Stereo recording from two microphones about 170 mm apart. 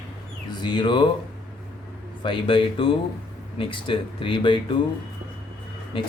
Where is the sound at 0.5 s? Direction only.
25° left (ahead or behind).